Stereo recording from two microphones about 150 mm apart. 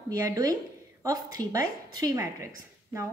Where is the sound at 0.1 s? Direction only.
25° right (ahead or behind).